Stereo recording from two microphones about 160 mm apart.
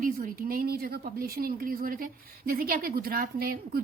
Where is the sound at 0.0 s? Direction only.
60° right (ahead or behind).